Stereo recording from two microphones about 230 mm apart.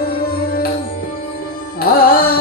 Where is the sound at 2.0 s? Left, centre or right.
Left.